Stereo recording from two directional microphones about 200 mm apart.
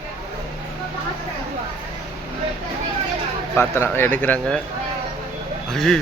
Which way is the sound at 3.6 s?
10° left (ahead or behind).